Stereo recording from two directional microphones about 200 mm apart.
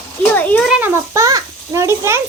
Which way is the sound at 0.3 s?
10° left (ahead or behind).